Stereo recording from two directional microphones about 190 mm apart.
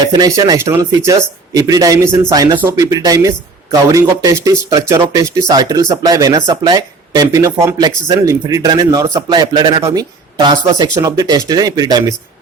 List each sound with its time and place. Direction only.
0.1 s speech: 20° right (ahead or behind)